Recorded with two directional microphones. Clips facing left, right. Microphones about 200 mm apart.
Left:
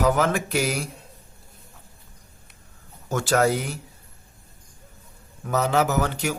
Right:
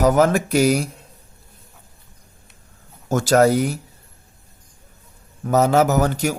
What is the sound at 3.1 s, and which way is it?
Speech, 40° right (ahead or behind).